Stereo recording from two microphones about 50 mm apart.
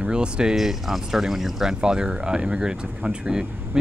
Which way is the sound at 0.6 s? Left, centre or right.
Centre.